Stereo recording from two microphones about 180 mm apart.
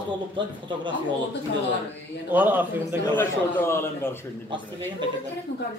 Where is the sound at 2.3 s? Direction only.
10° right (ahead or behind).